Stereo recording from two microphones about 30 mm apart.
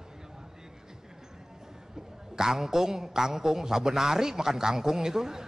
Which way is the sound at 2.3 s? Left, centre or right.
Centre.